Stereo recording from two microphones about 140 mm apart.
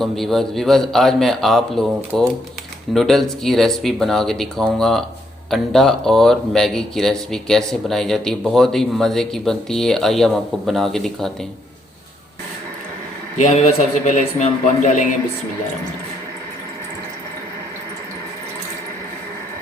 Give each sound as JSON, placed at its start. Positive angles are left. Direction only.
{"t": 0.0, "sound": "speech", "side_deg": 0}
{"t": 13.3, "sound": "a man's voice", "side_deg": 55}